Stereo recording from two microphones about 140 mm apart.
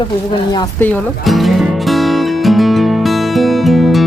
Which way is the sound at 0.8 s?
15° left (ahead or behind).